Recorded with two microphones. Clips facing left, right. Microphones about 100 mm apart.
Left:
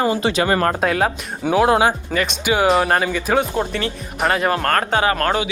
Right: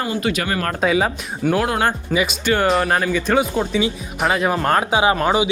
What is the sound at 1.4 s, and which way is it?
Speech, 15° left (ahead or behind).